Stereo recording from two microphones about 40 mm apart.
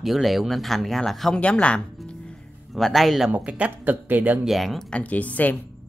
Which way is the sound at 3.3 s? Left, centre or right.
Right.